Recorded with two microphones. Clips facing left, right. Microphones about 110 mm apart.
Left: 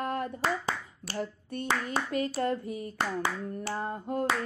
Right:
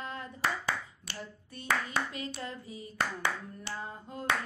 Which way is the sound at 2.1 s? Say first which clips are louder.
Left 11 dB; 50° left (ahead or behind).